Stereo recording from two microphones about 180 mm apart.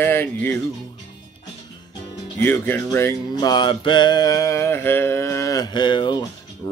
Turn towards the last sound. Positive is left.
turn(degrees=25)  # may be behind; listen again after turning